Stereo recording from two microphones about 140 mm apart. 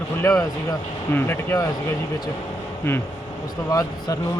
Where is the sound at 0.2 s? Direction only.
20° left (ahead or behind).